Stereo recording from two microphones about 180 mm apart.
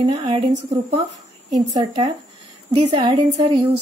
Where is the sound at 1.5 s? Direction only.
25° right (ahead or behind).